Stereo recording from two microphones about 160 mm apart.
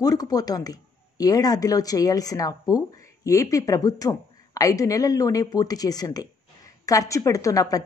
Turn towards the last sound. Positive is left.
turn(degrees=20)  # may be behind; listen again after turning